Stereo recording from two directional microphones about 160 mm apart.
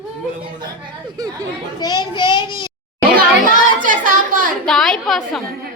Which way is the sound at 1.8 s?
25° left (ahead or behind).